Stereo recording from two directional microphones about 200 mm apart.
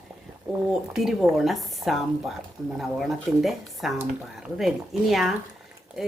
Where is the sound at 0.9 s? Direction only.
Centre (ahead or behind).